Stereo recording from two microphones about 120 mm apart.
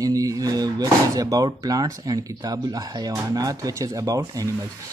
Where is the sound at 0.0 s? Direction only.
30° right (ahead or behind).